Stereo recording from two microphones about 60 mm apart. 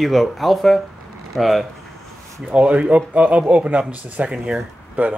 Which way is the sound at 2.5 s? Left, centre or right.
Centre.